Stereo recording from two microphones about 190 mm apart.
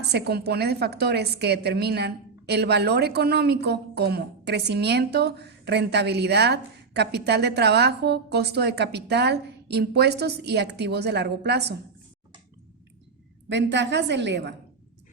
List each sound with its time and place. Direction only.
0.1 s a woman's voice: 60° right (ahead or behind)
13.5 s a woman's voice: 70° right (ahead or behind)